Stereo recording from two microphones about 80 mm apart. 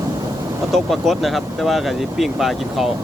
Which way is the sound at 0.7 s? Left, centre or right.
Centre.